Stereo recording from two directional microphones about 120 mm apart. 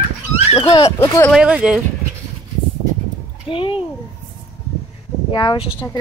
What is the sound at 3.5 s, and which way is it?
Speech, 45° left (ahead or behind).